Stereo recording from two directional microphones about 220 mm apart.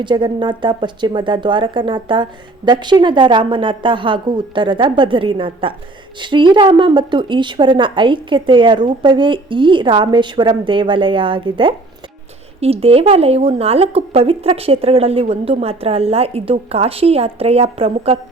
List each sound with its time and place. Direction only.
0.0 s speech: 20° right (ahead or behind)